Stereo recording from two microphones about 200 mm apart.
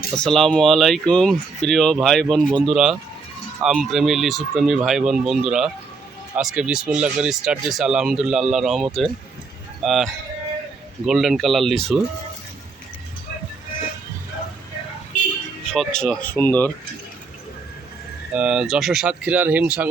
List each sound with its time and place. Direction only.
0.2 s speech: centre (ahead or behind)
15.7 s speech: 5° left (ahead or behind)
18.3 s speech: 5° right (ahead or behind)